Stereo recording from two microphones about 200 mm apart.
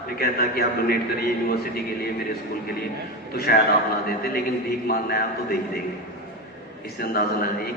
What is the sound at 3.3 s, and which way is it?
Speech, 50° left (ahead or behind).